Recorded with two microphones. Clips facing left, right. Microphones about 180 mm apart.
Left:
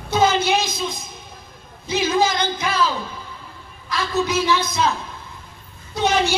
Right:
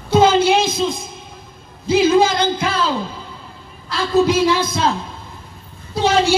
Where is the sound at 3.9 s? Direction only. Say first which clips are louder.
Right 6 dB; 30° right (ahead or behind).